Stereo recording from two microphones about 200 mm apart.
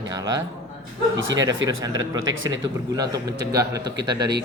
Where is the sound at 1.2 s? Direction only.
70° right (ahead or behind).